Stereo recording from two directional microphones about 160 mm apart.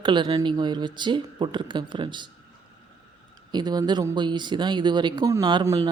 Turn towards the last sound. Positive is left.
turn(degrees=-20)  # may be behind; listen again after turning